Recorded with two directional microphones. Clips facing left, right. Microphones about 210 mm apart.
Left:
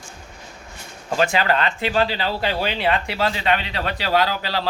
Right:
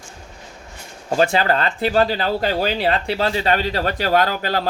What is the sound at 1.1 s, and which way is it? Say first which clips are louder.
Speech: right 2 dB; 35° right (ahead or behind).